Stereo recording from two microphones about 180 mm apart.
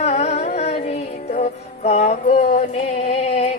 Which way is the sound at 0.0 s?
35° left (ahead or behind).